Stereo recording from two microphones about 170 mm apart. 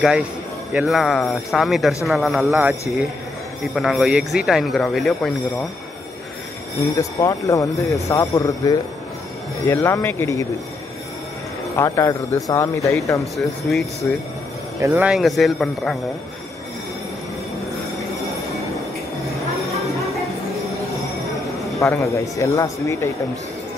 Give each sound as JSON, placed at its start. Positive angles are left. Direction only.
{"t": 0.7, "sound": "speech", "side_deg": 0}
{"t": 3.7, "sound": "speech", "side_deg": 0}
{"t": 6.8, "sound": "speech", "side_deg": 20}
{"t": 11.7, "sound": "speech", "side_deg": 15}
{"t": 13.4, "sound": "speech", "side_deg": 10}
{"t": 14.8, "sound": "speech", "side_deg": -20}
{"t": 15.0, "sound": "speech", "side_deg": 0}
{"t": 21.7, "sound": "speech", "side_deg": 20}